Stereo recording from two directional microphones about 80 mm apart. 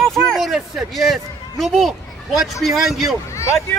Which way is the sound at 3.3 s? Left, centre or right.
Left.